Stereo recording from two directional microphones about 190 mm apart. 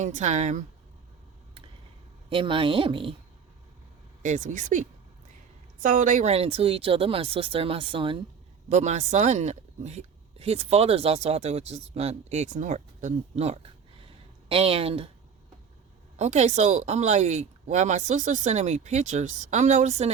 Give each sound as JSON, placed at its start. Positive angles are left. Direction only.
{"t": 0.0, "sound": "speech", "side_deg": -40}
{"t": 2.3, "sound": "speech", "side_deg": -25}
{"t": 4.2, "sound": "speech", "side_deg": -40}
{"t": 8.7, "sound": "speech", "side_deg": -35}
{"t": 16.1, "sound": "speech", "side_deg": -35}